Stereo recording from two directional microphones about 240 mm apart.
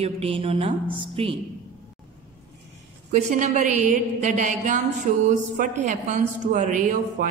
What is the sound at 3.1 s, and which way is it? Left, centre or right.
A woman's voice, right.